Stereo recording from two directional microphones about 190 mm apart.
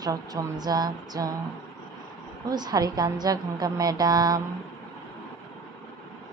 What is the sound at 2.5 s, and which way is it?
A woman's voice, 20° right (ahead or behind).